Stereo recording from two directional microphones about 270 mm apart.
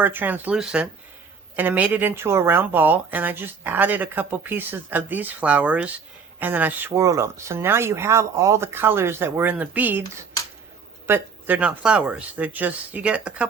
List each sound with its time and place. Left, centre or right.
0.0 s speech: centre
11.0 s speech: centre